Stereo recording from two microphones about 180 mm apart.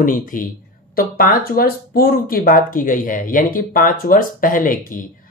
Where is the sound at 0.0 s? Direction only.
50° left (ahead or behind).